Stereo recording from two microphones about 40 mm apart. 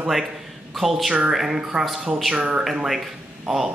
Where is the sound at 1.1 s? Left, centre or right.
Centre.